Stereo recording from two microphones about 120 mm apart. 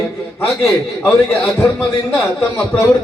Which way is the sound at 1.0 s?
20° left (ahead or behind).